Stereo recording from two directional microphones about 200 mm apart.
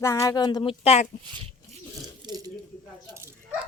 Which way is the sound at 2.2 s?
20° right (ahead or behind).